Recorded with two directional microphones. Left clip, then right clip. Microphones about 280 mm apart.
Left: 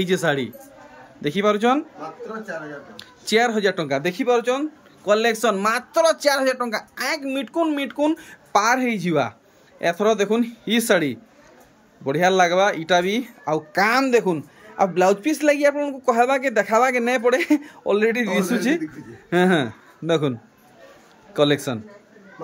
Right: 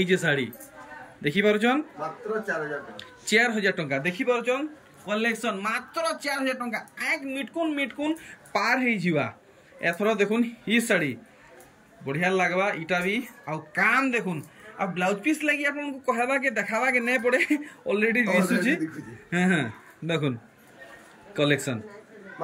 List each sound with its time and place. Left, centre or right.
0.0 s speech: centre
3.0 s speech: centre
15.3 s speech: left
15.8 s a man's voice: centre
21.4 s speech: centre